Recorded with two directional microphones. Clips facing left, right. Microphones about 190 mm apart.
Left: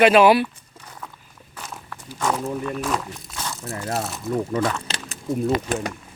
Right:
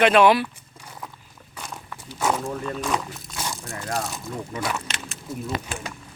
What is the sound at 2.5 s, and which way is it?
Speech, 5° left (ahead or behind).